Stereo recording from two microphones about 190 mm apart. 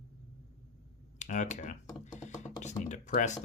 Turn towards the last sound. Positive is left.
turn(degrees=40)  # may be behind; listen again after turning